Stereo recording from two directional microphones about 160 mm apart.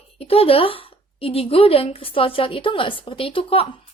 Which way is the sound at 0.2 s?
35° left (ahead or behind).